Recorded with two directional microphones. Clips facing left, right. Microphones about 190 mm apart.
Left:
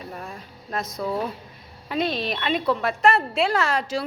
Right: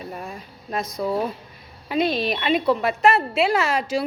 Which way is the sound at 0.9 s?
15° right (ahead or behind).